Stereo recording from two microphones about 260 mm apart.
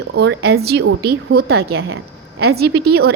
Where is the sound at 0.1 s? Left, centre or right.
Right.